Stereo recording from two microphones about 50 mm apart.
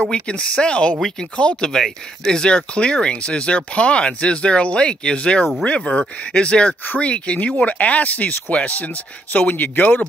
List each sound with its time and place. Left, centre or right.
0.1 s speech: centre; by 10.0 s left